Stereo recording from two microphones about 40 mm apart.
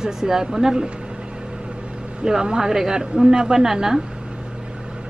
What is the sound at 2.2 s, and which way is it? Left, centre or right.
Speech, centre.